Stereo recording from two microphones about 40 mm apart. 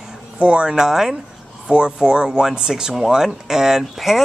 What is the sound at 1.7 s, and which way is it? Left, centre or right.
Speech, right.